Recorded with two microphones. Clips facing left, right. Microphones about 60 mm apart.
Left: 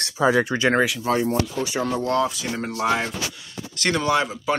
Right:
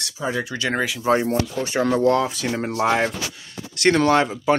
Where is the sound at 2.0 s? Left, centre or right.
Right.